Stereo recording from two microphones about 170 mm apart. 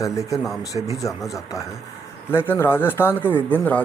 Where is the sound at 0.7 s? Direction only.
30° left (ahead or behind).